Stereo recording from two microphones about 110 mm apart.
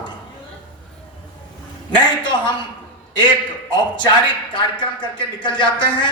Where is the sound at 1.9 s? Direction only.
45° left (ahead or behind).